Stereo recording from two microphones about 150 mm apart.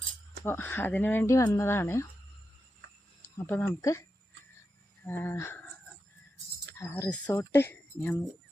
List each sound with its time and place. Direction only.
0.4 s speech: 15° left (ahead or behind)
3.3 s speech: 15° left (ahead or behind)
5.0 s speech: 15° left (ahead or behind)
6.7 s speech: 15° left (ahead or behind)